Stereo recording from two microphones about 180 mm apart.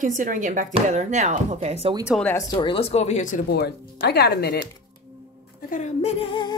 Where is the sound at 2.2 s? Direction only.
15° left (ahead or behind).